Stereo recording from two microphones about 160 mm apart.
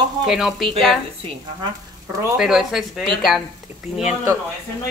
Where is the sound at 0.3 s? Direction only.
Centre (ahead or behind).